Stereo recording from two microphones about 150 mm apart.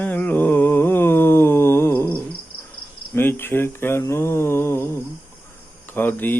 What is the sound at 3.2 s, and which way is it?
Speech, 15° left (ahead or behind).